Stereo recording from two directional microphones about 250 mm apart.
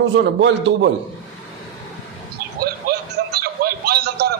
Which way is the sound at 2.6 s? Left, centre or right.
Right.